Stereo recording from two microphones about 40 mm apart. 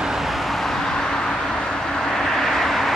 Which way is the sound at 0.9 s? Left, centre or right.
Centre.